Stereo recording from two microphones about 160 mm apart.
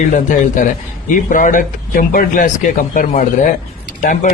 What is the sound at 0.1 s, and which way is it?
A man's voice, 55° left (ahead or behind).